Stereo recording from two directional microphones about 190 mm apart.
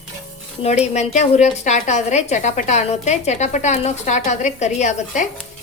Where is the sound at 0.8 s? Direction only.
40° left (ahead or behind).